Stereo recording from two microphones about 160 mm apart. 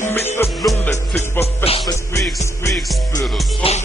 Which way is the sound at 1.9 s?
20° left (ahead or behind).